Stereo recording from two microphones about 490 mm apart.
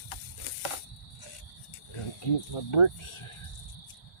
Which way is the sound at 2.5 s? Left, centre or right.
Left.